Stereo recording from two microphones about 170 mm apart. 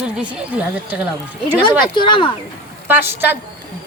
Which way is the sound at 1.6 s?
25° left (ahead or behind).